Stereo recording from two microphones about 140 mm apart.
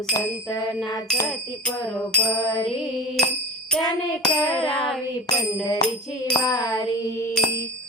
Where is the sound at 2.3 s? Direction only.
25° left (ahead or behind).